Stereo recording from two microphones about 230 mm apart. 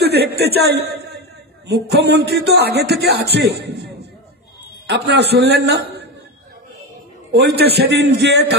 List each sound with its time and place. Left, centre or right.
0.0 s a man's voice: right
7.3 s a man's voice: right